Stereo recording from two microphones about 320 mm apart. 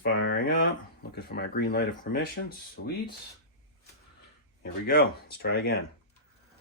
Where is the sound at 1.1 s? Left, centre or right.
Left.